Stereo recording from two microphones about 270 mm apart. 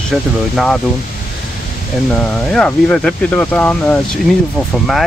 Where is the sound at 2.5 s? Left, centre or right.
Centre.